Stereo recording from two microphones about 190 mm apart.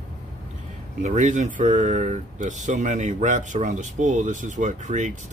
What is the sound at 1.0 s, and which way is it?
Speech, 40° right (ahead or behind).